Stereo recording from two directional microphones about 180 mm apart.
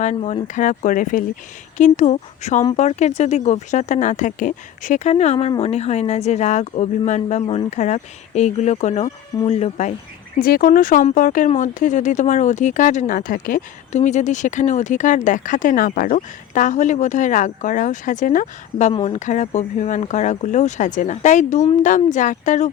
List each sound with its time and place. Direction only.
0.0 s speech: 40° left (ahead or behind)
10.4 s speech: 50° left (ahead or behind)